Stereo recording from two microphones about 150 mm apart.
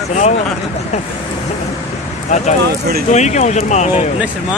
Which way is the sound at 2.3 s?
50° left (ahead or behind).